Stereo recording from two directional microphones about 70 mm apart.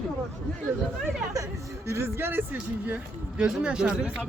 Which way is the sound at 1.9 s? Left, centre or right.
Right.